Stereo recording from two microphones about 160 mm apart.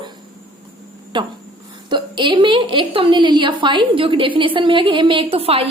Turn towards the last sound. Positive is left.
turn(degrees=-35)  # may be behind; listen again after turning